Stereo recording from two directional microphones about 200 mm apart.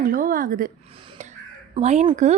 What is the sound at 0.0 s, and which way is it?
Speech, 45° right (ahead or behind).